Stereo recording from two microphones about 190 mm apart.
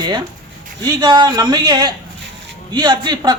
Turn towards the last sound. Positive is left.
turn(degrees=-20)  # may be behind; listen again after turning